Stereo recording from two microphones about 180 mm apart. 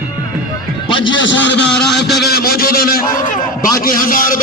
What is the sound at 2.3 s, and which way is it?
A man's voice, 55° left (ahead or behind).